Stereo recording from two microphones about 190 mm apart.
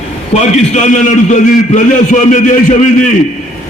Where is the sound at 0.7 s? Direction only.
40° left (ahead or behind).